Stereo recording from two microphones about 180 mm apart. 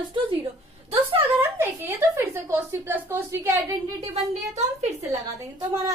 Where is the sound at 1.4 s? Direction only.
15° right (ahead or behind).